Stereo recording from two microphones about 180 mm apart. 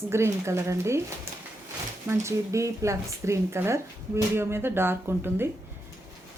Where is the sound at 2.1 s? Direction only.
15° right (ahead or behind).